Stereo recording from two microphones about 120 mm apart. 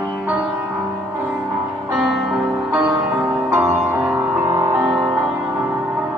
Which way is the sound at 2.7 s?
25° right (ahead or behind).